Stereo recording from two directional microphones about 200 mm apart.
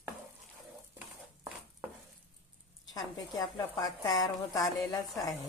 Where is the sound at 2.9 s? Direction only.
20° left (ahead or behind).